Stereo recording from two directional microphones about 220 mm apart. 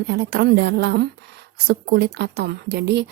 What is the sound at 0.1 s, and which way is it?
A woman's voice, 50° right (ahead or behind).